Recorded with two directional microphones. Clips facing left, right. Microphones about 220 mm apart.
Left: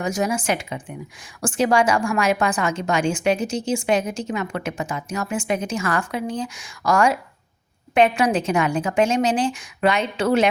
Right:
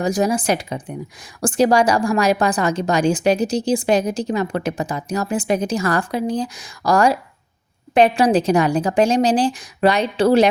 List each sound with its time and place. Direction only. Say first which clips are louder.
0.0 s a woman's voice: right 4 dB; 35° right (ahead or behind)